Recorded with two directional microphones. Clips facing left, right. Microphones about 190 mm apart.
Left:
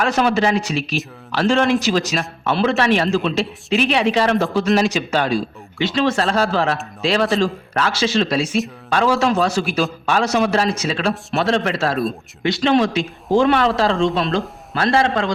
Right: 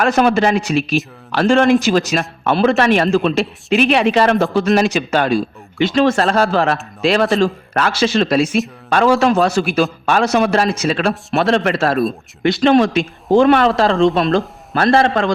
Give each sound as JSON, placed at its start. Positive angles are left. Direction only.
{"t": 0.0, "sound": "speech", "side_deg": -50}